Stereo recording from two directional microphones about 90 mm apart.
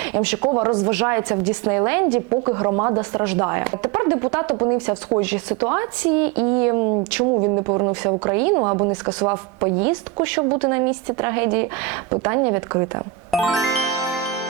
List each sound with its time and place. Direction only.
0.0 s a woman's voice: 20° right (ahead or behind)